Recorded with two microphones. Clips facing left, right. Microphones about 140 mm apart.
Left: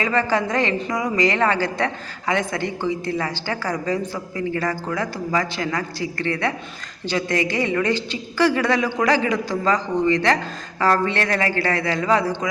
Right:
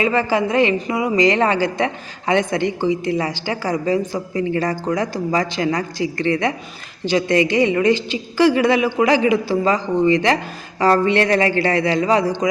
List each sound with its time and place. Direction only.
0.0 s a woman's voice: 15° right (ahead or behind)